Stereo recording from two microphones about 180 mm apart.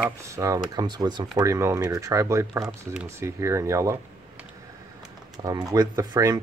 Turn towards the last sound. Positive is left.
turn(degrees=-20)  # may be behind; listen again after turning